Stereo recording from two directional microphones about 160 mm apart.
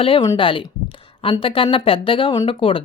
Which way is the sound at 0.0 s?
35° left (ahead or behind).